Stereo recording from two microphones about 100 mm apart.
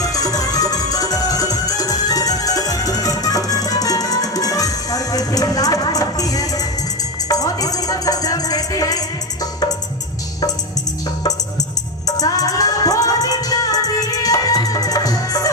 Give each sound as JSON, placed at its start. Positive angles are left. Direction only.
{"t": 0.0, "sound": "music", "side_deg": 35}
{"t": 12.0, "sound": "music", "side_deg": 40}